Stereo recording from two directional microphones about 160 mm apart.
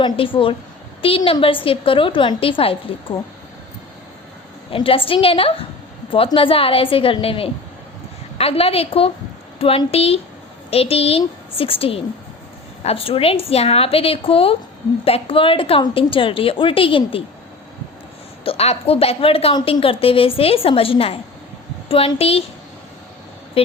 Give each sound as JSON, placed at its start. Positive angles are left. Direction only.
{"t": 0.0, "sound": "a woman's voice", "side_deg": 35}
{"t": 4.7, "sound": "a woman's voice", "side_deg": 35}
{"t": 18.4, "sound": "a woman's voice", "side_deg": 40}
{"t": 23.6, "sound": "a woman's voice", "side_deg": 35}